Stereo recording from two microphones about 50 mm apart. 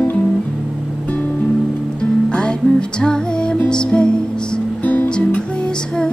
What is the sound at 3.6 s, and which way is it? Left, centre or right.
Music, centre.